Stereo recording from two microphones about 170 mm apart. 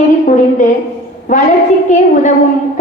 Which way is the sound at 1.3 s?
50° left (ahead or behind).